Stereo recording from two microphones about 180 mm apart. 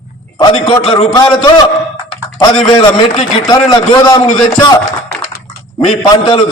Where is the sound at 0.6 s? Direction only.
30° left (ahead or behind).